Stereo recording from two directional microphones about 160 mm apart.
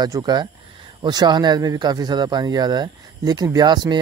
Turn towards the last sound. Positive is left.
turn(degrees=-25)  # may be behind; listen again after turning